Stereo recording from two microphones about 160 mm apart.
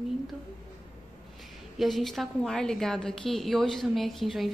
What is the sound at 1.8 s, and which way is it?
A woman's voice, centre (ahead or behind).